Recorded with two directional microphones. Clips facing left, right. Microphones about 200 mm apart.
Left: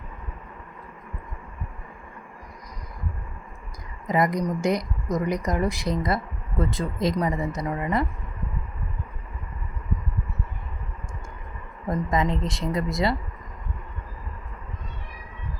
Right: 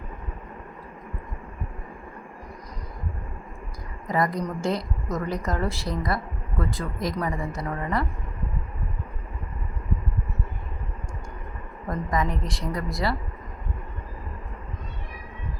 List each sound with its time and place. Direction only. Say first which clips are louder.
4.0 s a woman's voice: left 2 dB; 20° left (ahead or behind)
11.9 s speech: left 2 dB; 25° left (ahead or behind)